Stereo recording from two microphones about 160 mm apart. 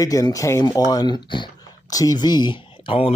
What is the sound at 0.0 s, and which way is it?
Speech, 20° left (ahead or behind).